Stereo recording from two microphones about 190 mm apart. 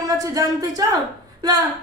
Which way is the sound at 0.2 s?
15° right (ahead or behind).